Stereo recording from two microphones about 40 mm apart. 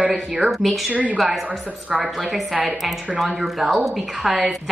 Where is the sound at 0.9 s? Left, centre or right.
Right.